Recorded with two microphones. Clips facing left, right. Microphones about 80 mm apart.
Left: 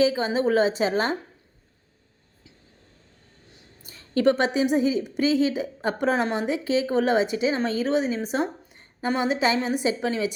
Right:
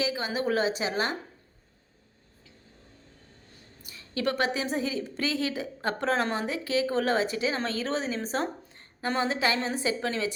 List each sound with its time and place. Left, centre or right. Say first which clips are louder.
0.0 s a woman's voice: left 8 dB; left
3.8 s a woman's voice: left 9 dB; left; by 10.3 s centre